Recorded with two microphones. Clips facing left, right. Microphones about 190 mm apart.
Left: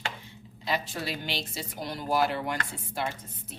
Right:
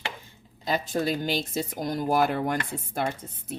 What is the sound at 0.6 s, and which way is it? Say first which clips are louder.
A woman's voice: right 5 dB; 45° right (ahead or behind).